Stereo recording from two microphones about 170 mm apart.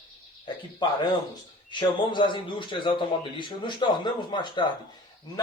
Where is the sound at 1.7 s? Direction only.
30° left (ahead or behind).